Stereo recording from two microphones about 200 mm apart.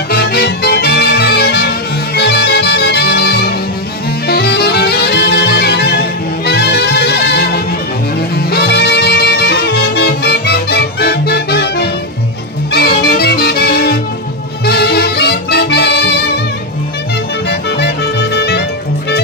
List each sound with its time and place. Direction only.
0.1 s music: 50° left (ahead or behind)
17.5 s music: 55° left (ahead or behind)